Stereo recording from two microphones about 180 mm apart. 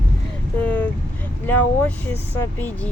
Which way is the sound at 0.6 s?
10° left (ahead or behind).